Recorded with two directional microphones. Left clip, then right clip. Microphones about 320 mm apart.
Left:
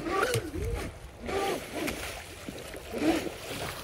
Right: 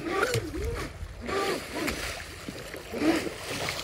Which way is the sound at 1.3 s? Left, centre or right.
Centre.